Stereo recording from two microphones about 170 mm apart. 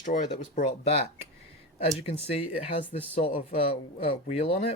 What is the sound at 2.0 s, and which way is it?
Speech, 35° left (ahead or behind).